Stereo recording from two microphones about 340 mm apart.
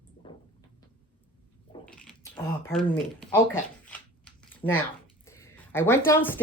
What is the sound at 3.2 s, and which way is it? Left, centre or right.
Speech, centre.